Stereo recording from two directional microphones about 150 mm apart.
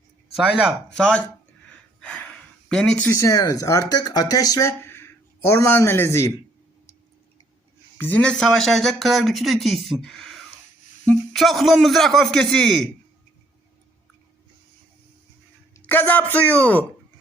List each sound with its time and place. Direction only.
0.3 s speech: 5° right (ahead or behind); by 6.3 s 20° left (ahead or behind)
7.9 s speech: 10° left (ahead or behind)
15.7 s speech: 10° left (ahead or behind)